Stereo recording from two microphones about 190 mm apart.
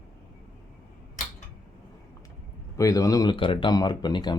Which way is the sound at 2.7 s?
15° left (ahead or behind).